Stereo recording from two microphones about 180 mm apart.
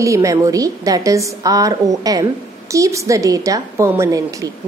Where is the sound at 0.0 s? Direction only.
15° right (ahead or behind).